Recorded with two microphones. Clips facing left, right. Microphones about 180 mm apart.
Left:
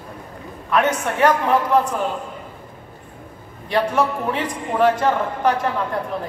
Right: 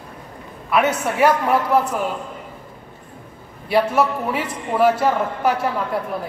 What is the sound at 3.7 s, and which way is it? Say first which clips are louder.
A man's voice: right 2 dB; 10° right (ahead or behind).